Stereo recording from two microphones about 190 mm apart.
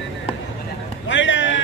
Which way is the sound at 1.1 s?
75° left (ahead or behind).